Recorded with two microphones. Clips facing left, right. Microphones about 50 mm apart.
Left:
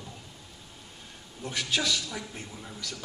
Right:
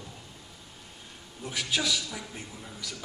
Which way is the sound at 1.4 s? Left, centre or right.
Centre.